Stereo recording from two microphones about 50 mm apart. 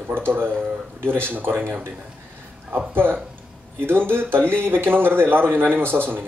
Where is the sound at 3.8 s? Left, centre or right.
Right.